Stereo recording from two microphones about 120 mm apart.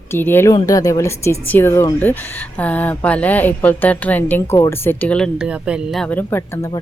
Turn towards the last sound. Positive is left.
turn(degrees=20)  # may be behind; listen again after turning